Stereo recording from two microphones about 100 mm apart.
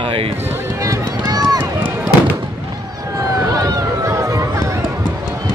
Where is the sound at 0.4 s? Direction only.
20° right (ahead or behind).